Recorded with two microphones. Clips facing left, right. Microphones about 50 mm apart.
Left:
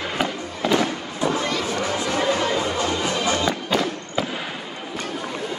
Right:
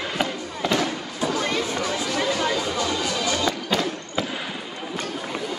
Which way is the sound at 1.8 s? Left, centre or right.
Left.